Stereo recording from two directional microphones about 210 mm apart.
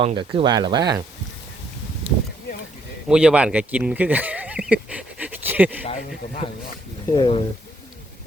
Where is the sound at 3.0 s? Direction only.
5° right (ahead or behind).